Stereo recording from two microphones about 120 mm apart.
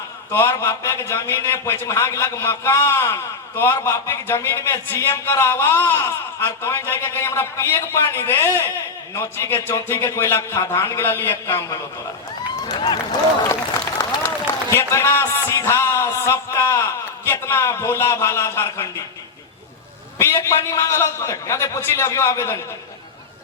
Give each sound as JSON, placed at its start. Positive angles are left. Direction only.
{"t": 0.3, "sound": "a man's voice", "side_deg": 25}
{"t": 12.6, "sound": "speech", "side_deg": 35}
{"t": 14.2, "sound": "a man's voice", "side_deg": 20}
{"t": 20.1, "sound": "a man's voice", "side_deg": 20}